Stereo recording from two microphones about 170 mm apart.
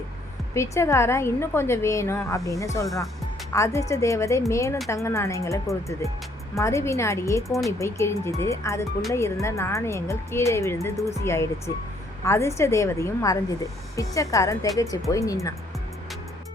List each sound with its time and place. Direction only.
0.5 s a woman's voice: 15° left (ahead or behind)
2.8 s speech: centre (ahead or behind)
3.5 s a woman's voice: 20° left (ahead or behind)
7.4 s speech: centre (ahead or behind)
7.8 s a woman's voice: 15° left (ahead or behind)